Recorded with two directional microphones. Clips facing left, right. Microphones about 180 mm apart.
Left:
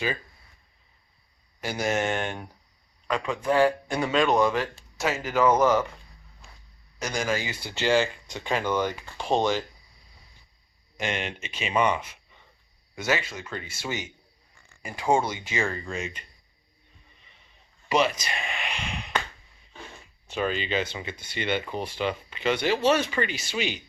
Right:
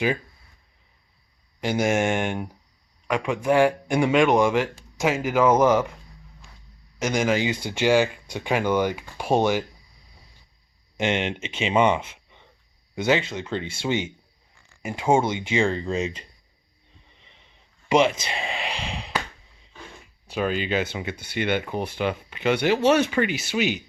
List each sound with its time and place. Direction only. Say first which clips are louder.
1.9 s speech: even; 10° right (ahead or behind)
7.0 s speech: right 6 dB; 15° right (ahead or behind)
10.9 s speech: right 6 dB; 20° right (ahead or behind)
17.8 s a sound: right 4 dB; 20° right (ahead or behind)
20.3 s speech: right 3 dB; 5° right (ahead or behind)